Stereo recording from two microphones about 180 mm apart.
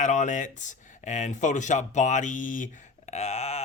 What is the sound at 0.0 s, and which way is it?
Speech, 40° left (ahead or behind).